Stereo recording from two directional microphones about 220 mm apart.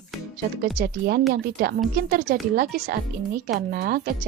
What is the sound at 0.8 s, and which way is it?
A woman's voice, 45° right (ahead or behind).